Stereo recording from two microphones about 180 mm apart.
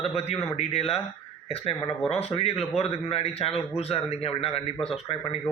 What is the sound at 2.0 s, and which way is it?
A man's voice, 35° left (ahead or behind).